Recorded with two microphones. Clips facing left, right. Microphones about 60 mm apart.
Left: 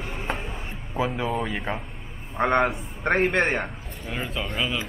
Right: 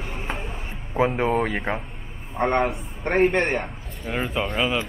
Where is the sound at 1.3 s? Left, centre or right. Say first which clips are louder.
Right 5 dB; right.